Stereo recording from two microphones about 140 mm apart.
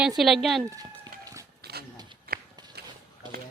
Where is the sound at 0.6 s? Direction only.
20° right (ahead or behind).